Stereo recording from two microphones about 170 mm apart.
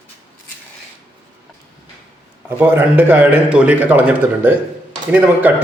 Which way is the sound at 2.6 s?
10° right (ahead or behind).